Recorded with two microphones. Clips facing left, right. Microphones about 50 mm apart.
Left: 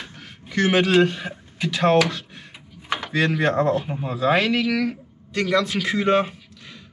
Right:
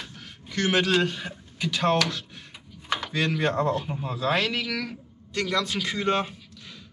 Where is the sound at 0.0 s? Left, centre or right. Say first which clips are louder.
Left 3 dB; centre.